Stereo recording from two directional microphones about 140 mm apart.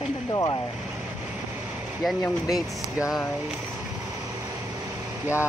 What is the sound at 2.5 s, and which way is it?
Speech, centre (ahead or behind).